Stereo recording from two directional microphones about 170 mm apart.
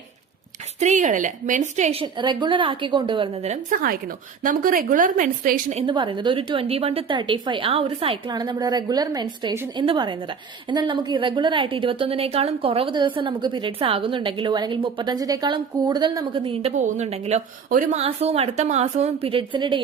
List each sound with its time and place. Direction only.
0.8 s a woman's voice: 45° right (ahead or behind); by 3.2 s 30° right (ahead or behind)
3.4 s a woman's voice: 40° right (ahead or behind)
4.4 s a woman's voice: 55° right (ahead or behind)
5.8 s a woman's voice: 30° right (ahead or behind)